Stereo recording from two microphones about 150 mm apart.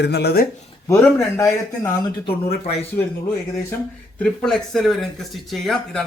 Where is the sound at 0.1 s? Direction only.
90° left.